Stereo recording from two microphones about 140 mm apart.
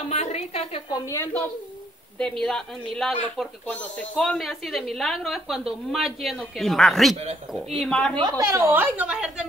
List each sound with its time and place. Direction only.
0.1 s a woman's voice: 50° left (ahead or behind)
1.0 s a woman's voice: 20° left (ahead or behind)
2.1 s a woman's voice: 5° left (ahead or behind)
8.2 s a woman's voice: 25° right (ahead or behind); by 9.5 s 5° right (ahead or behind)